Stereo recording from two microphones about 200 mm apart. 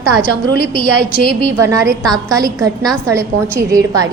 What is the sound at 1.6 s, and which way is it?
Speech, 15° right (ahead or behind).